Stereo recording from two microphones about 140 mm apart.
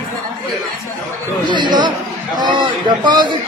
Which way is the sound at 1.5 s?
35° right (ahead or behind).